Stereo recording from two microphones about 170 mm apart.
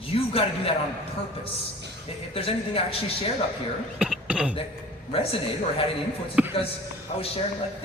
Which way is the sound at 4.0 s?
5° right (ahead or behind).